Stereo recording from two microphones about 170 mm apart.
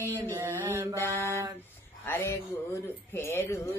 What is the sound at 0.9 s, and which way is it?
Mantra, 15° left (ahead or behind).